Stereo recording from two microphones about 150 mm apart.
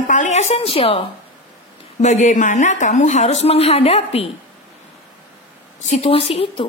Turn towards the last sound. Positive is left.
turn(degrees=40)  # may be behind; listen again after turning